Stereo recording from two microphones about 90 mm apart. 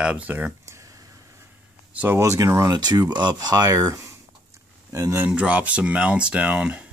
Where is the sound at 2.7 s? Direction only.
50° right (ahead or behind).